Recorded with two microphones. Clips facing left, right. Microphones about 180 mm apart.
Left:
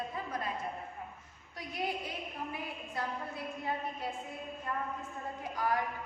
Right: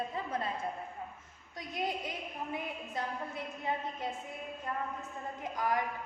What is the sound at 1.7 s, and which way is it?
A woman's voice, 20° right (ahead or behind).